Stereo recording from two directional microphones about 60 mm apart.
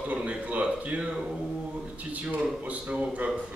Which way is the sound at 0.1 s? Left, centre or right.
Right.